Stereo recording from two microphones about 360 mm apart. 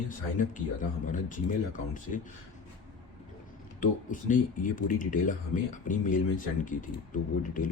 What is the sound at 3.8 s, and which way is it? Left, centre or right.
Speech, left.